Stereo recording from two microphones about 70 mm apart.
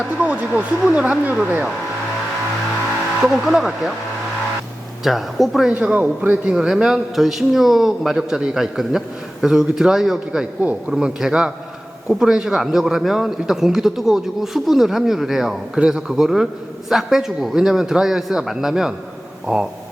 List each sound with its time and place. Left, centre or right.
0.2 s speech: centre
3.2 s a man's voice: centre
5.0 s a man's voice: centre
5.7 s a man's voice: centre
10.6 s speech: centre
10.9 s a man's voice: centre